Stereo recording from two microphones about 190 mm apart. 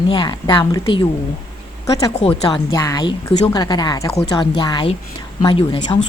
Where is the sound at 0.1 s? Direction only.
25° left (ahead or behind).